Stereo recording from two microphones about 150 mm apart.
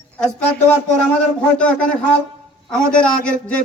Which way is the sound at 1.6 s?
5° left (ahead or behind).